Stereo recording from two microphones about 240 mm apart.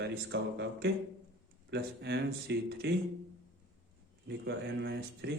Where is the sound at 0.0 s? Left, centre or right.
Right.